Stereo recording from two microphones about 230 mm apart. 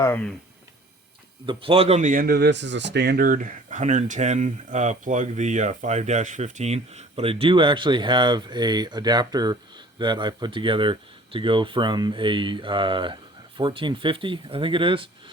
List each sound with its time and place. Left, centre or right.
0.0 s speech: centre
1.5 s speech: right